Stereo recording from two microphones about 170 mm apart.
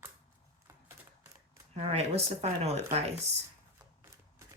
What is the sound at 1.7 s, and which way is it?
Speech, 40° right (ahead or behind).